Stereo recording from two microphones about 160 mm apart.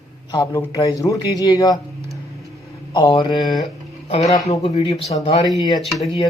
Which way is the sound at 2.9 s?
30° left (ahead or behind).